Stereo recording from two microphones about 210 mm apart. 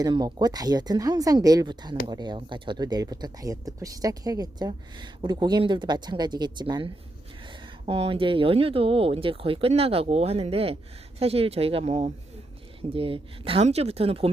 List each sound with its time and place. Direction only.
0.0 s speech: 20° right (ahead or behind)